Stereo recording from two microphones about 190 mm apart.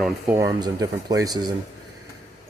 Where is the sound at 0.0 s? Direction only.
15° right (ahead or behind).